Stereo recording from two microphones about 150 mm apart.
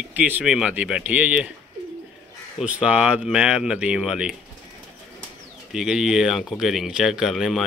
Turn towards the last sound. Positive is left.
turn(degrees=0)  # may be behind; listen again after turning